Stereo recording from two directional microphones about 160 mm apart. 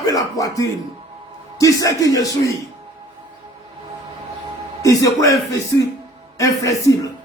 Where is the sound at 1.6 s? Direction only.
20° left (ahead or behind).